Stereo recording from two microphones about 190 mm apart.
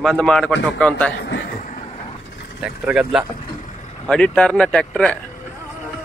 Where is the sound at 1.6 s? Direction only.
40° left (ahead or behind).